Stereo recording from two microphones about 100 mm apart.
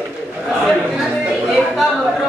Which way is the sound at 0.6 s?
Centre (ahead or behind).